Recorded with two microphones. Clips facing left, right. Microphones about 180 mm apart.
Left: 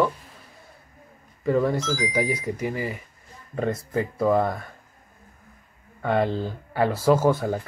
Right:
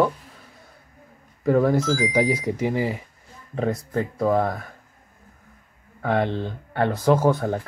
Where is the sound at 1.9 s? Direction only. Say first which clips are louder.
Right 4 dB; 25° right (ahead or behind).